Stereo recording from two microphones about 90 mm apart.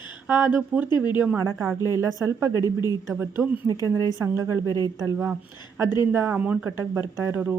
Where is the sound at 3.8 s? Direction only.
35° right (ahead or behind).